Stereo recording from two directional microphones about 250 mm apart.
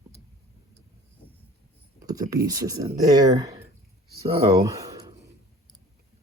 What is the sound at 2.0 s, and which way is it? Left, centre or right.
Speech, centre.